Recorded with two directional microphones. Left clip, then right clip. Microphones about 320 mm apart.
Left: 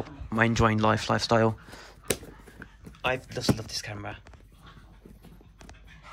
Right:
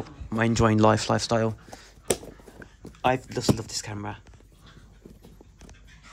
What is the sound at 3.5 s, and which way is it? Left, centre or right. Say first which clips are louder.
Speech: right 2 dB; right.